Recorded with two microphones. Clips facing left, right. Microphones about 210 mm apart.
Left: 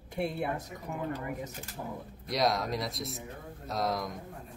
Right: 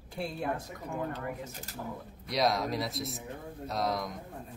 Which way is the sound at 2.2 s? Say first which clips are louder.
Even; centre (ahead or behind).